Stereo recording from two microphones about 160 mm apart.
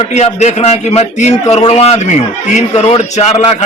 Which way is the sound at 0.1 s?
45° left (ahead or behind).